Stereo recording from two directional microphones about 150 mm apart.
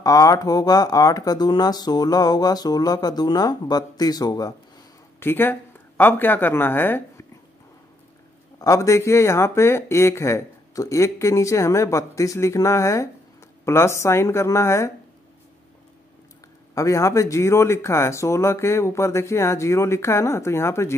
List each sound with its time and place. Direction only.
0.0 s speech: 25° left (ahead or behind)
5.2 s speech: 15° left (ahead or behind)
8.5 s speech: 20° left (ahead or behind)
16.7 s speech: 20° left (ahead or behind)